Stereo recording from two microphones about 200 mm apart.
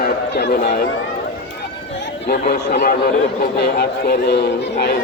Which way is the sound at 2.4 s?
50° left (ahead or behind).